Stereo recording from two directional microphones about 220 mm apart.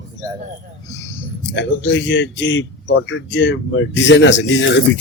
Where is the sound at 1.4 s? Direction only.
55° left (ahead or behind).